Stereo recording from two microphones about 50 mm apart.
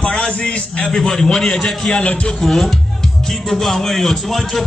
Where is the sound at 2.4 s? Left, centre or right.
Centre.